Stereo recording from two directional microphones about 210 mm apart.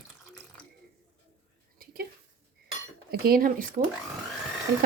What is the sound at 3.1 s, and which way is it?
Speech, 45° right (ahead or behind).